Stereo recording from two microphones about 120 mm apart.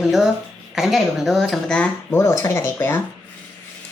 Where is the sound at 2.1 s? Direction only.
25° left (ahead or behind).